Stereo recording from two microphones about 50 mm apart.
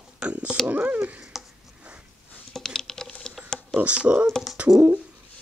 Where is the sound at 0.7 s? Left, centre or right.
Right.